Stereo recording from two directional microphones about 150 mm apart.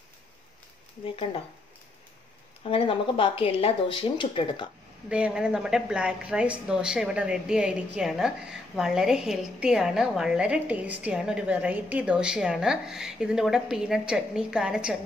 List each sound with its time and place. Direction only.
1.0 s speech: 40° left (ahead or behind)
2.7 s speech: 35° left (ahead or behind)
5.1 s a woman's voice: 5° right (ahead or behind)